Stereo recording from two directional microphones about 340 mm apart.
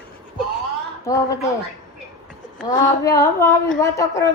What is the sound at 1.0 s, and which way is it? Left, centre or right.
Speech, centre.